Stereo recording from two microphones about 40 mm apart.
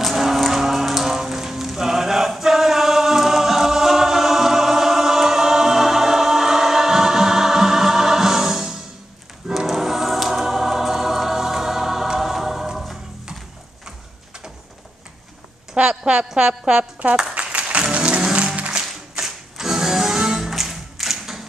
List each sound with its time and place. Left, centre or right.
0.0 s music: centre
9.7 s choir: centre
15.7 s a sound: right
16.3 s a woman's voice: centre
17.1 s a sound: right
17.9 s music: right; by 21.4 s centre